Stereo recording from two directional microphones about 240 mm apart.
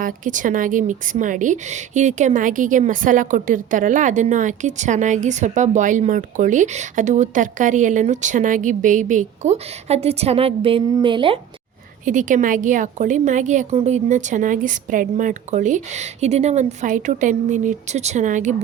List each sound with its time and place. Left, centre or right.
0.0 s a woman's voice: right
12.0 s a woman's voice: right